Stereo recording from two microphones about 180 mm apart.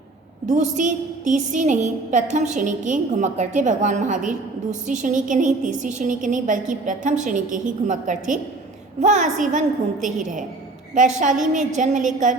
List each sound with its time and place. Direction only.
0.5 s a woman's voice: 45° right (ahead or behind)
11.5 s a woman's voice: 45° right (ahead or behind)